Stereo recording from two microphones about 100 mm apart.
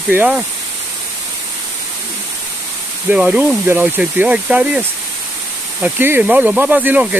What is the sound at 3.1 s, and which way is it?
Speech, 15° right (ahead or behind).